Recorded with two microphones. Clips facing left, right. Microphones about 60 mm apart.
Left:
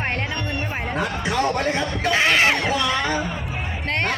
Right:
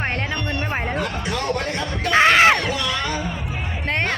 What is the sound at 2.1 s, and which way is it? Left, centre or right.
Heart sounds, right.